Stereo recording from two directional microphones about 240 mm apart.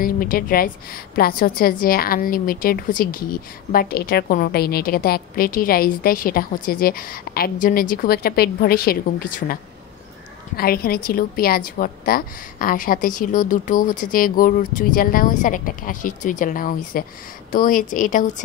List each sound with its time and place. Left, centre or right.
0.0 s a woman's voice: left